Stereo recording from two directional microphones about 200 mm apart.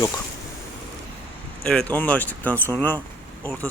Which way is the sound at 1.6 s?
5° left (ahead or behind).